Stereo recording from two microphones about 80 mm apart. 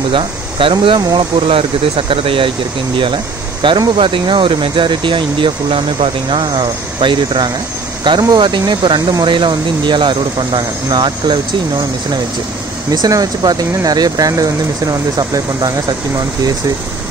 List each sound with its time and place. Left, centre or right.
0.1 s speech: right
2.0 s speech: right
3.6 s speech: right
8.0 s speech: right
12.9 s speech: right